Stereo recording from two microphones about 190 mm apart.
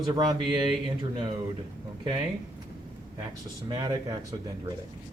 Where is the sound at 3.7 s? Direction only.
20° right (ahead or behind).